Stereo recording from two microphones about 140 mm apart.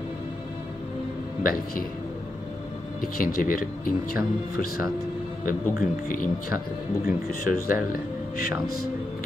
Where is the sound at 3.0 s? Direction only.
90° left.